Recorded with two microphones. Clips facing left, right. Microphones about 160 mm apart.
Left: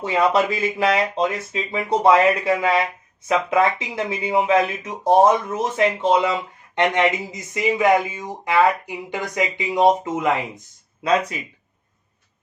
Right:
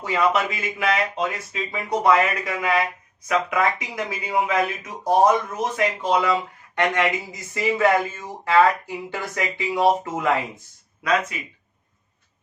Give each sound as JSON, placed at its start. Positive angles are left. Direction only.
{"t": 0.0, "sound": "speech", "side_deg": 30}
{"t": 11.0, "sound": "speech", "side_deg": 30}